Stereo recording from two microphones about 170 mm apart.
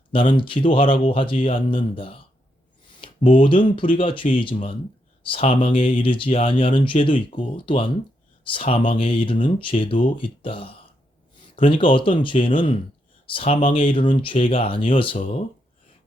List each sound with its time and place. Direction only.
0.1 s speech: 30° left (ahead or behind)
3.4 s speech: 30° left (ahead or behind)